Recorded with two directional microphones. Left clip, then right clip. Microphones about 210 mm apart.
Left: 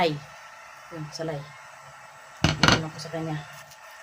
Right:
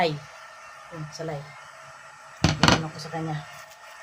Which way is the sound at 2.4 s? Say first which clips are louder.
Even; 10° right (ahead or behind).